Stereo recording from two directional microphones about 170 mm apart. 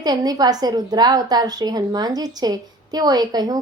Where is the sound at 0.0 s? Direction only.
25° right (ahead or behind).